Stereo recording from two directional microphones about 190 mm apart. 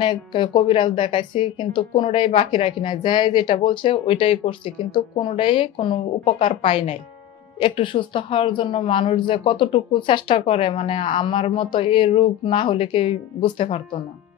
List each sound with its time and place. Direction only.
0.0 s speech: 25° left (ahead or behind)